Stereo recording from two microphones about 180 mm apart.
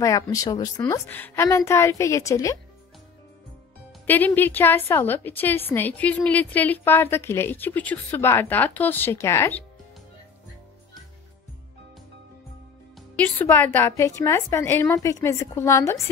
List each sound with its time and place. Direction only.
0.0 s a woman's voice: 20° left (ahead or behind)
4.0 s a woman's voice: 10° left (ahead or behind)
13.2 s a woman's voice: 10° left (ahead or behind)